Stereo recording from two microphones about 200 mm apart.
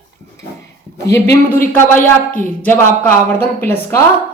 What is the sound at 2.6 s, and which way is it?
A woman's voice, 10° left (ahead or behind).